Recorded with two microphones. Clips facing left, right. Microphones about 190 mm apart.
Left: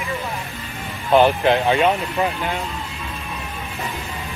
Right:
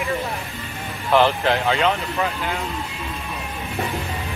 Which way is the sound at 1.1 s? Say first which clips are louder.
Left 3 dB; 20° left (ahead or behind).